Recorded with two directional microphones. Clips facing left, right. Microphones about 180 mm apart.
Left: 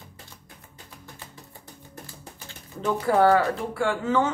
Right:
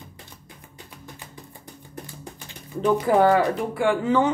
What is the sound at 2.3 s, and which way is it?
Speech, 15° right (ahead or behind).